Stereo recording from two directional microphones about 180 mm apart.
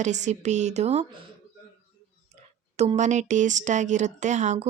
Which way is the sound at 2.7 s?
35° right (ahead or behind).